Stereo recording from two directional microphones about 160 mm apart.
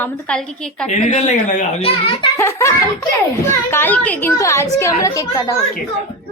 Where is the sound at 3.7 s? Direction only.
10° left (ahead or behind).